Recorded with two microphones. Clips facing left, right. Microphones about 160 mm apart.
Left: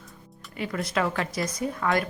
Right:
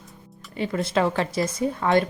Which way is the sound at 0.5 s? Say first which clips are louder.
Right 4 dB; 30° right (ahead or behind).